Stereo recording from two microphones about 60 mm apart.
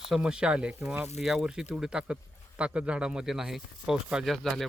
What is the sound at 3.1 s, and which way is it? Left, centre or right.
A man's voice, centre.